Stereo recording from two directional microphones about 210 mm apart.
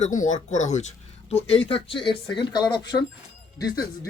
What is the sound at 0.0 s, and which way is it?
Speech, 35° left (ahead or behind).